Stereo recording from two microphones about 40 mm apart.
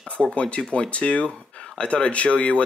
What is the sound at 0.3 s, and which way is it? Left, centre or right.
Speech, left.